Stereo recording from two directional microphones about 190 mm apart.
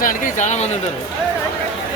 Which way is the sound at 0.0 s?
40° left (ahead or behind).